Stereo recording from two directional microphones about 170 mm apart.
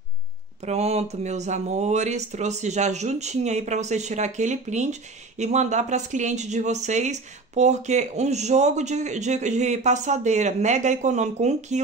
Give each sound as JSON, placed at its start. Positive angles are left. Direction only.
{"t": 0.7, "sound": "speech", "side_deg": -40}